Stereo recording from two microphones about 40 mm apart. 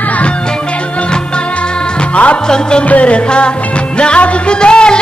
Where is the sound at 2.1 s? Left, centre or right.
Left.